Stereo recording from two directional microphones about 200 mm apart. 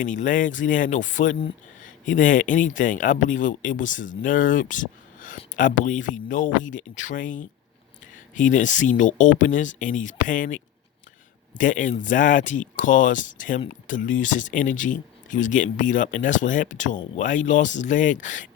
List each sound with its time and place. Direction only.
0.0 s speech: 40° left (ahead or behind)